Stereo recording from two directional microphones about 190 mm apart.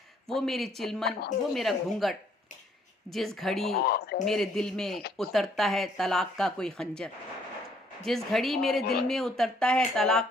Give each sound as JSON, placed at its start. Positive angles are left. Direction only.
{"t": 0.3, "sound": "speech", "side_deg": 0}
{"t": 3.7, "sound": "speech", "side_deg": 55}
{"t": 4.3, "sound": "speech", "side_deg": 0}